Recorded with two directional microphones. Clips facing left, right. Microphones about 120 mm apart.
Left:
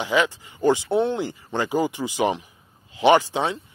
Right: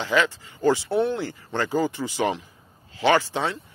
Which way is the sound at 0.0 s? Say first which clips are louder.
Left 1 dB; 15° left (ahead or behind).